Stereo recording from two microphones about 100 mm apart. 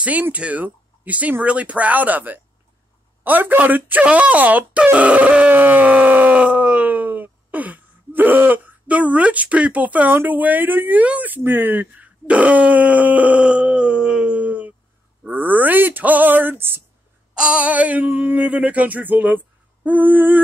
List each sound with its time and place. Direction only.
0.0 s speech: 15° right (ahead or behind)
15.2 s a sound: 20° right (ahead or behind)
17.3 s speech: 10° right (ahead or behind)